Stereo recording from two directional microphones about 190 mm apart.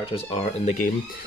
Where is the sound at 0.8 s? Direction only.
45° left (ahead or behind).